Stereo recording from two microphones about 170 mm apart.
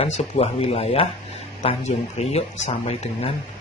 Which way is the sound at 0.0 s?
35° left (ahead or behind).